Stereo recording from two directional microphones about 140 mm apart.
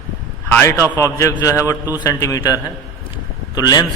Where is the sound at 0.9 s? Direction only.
20° left (ahead or behind).